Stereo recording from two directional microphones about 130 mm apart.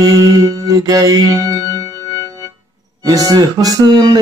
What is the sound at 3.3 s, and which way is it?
Speech, 30° right (ahead or behind).